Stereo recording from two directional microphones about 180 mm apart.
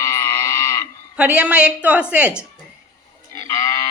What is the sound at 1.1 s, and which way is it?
A woman's voice, 5° right (ahead or behind).